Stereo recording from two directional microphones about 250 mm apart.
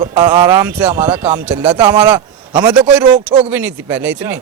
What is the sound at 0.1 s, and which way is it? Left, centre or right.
A man's voice, centre.